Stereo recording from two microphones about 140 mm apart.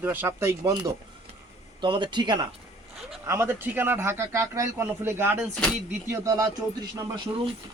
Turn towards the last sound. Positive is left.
turn(degrees=-30)  # may be behind; listen again after turning